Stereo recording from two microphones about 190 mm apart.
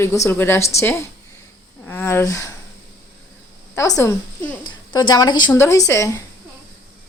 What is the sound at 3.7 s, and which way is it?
A woman's voice, 15° left (ahead or behind).